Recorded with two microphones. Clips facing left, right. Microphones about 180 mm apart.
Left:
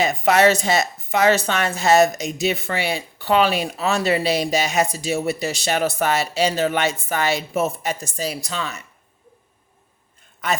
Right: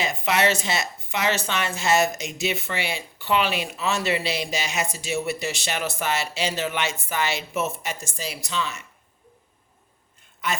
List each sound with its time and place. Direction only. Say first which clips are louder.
0.3 s a woman's voice: left 7 dB; 40° left (ahead or behind)